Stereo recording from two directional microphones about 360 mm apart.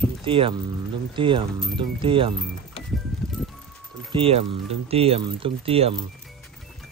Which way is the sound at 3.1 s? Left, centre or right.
Centre.